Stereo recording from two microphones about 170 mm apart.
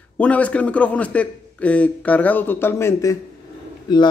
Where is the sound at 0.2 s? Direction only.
10° left (ahead or behind).